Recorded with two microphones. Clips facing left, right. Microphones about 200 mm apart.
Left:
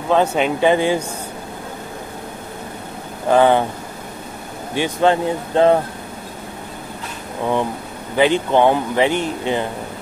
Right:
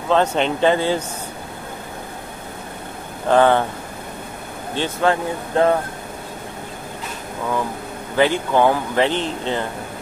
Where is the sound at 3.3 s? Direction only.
15° left (ahead or behind).